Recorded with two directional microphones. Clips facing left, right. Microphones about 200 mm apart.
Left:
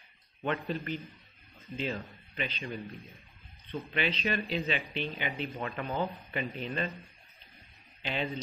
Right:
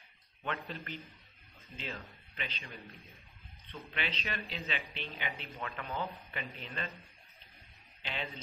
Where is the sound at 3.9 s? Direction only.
15° left (ahead or behind).